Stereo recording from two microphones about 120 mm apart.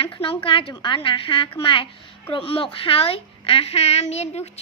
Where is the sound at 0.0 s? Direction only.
50° left (ahead or behind).